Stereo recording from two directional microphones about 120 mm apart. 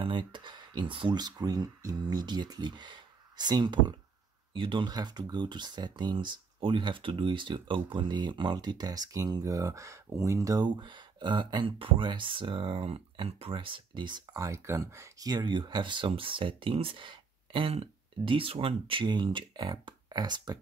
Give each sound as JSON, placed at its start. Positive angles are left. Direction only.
{"t": 0.0, "sound": "speech", "side_deg": -40}